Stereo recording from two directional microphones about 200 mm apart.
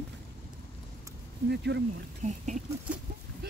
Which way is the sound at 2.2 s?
35° right (ahead or behind).